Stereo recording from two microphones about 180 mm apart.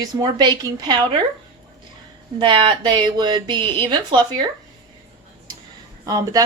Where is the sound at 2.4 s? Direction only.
25° right (ahead or behind).